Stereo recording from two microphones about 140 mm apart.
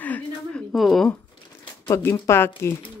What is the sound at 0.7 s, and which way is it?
Speech, centre (ahead or behind).